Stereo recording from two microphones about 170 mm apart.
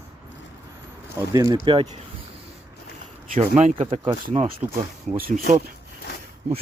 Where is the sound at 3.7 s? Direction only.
35° right (ahead or behind).